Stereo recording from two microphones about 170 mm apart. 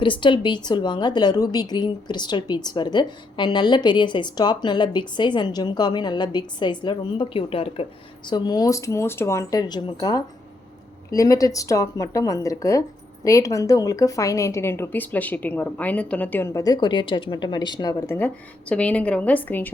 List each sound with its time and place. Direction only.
0.0 s a woman's voice: 30° left (ahead or behind)
8.3 s a woman's voice: 25° left (ahead or behind)
18.7 s a woman's voice: 5° left (ahead or behind)